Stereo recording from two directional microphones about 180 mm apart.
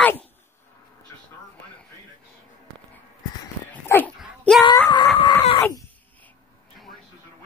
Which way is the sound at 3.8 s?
10° left (ahead or behind).